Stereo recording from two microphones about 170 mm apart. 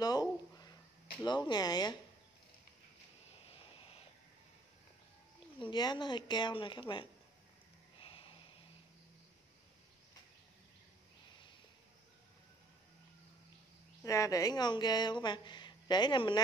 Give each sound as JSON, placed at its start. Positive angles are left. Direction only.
{"t": 0.0, "sound": "a sound", "side_deg": 25}
{"t": 1.2, "sound": "speech", "side_deg": 25}
{"t": 3.4, "sound": "vehicle", "side_deg": 30}
{"t": 5.6, "sound": "speech", "side_deg": 25}
{"t": 8.0, "sound": "snort", "side_deg": 35}
{"t": 14.0, "sound": "speech", "side_deg": 20}